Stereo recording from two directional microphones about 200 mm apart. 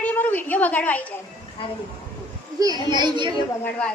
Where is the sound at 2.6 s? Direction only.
20° right (ahead or behind).